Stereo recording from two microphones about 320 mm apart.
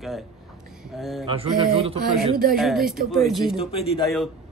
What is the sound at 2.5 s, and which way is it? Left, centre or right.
A man's voice, centre.